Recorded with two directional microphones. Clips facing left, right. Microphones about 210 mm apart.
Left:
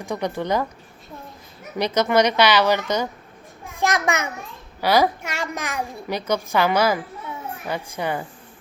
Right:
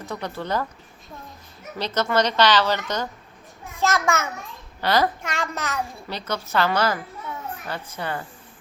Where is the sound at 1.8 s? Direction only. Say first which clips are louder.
Left 4 dB; 15° left (ahead or behind).